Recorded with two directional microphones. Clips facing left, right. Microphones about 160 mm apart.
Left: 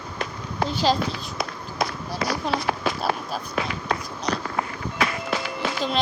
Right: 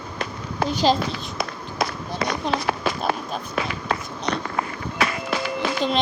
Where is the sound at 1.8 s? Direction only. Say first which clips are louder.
Right 1 dB; 75° right (ahead or behind).